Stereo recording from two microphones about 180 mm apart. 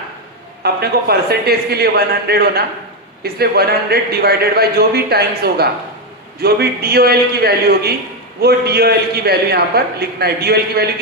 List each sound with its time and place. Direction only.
0.6 s a man's voice: 60° right (ahead or behind)